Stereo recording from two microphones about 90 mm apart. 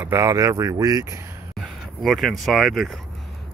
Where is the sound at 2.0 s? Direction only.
Centre (ahead or behind).